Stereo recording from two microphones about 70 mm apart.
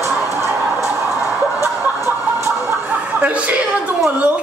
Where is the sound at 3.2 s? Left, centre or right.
Right.